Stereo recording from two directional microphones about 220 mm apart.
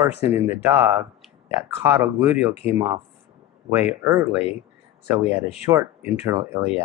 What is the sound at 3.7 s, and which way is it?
Speech, 10° right (ahead or behind).